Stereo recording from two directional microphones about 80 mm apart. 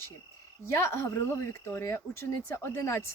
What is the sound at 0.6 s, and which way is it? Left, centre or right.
Speech, left.